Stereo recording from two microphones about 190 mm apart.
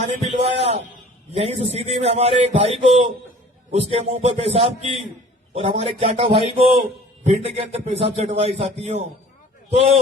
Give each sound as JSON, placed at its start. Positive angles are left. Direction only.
{"t": 0.2, "sound": "a man's voice", "side_deg": -35}